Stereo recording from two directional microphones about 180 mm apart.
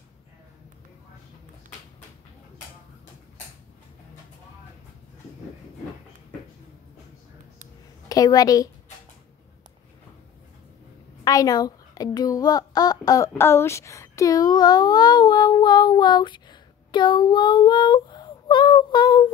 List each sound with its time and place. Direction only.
8.1 s a woman's voice: 20° left (ahead or behind)
11.2 s speech: 20° left (ahead or behind)